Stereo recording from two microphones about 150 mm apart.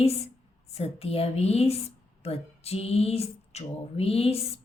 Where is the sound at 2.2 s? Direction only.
45° left (ahead or behind).